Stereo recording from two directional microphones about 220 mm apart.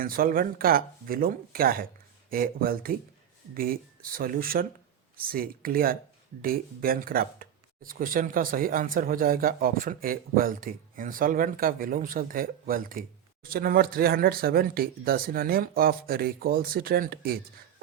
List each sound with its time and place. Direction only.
0.0 s speech: 40° right (ahead or behind)